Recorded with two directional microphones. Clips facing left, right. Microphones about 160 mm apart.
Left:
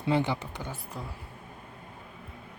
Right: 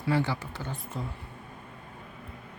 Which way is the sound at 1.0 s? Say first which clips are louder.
Right 5 dB; centre (ahead or behind).